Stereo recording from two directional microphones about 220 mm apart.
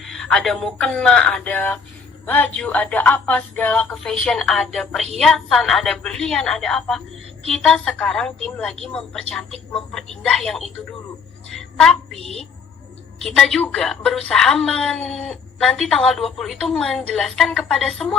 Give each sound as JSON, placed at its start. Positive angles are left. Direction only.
{"t": 0.0, "sound": "a woman's voice", "side_deg": 0}
{"t": 11.5, "sound": "a sound", "side_deg": 0}
{"t": 12.2, "sound": "speech", "side_deg": -25}
{"t": 13.2, "sound": "a woman's voice", "side_deg": 5}